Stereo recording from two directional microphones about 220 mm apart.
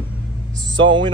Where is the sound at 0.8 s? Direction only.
60° right (ahead or behind).